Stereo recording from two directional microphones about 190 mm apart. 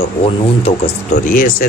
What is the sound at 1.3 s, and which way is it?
Speech, 45° left (ahead or behind).